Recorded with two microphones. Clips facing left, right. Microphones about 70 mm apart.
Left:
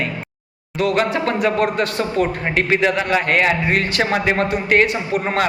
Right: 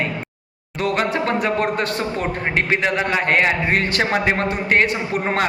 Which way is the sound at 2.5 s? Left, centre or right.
Right.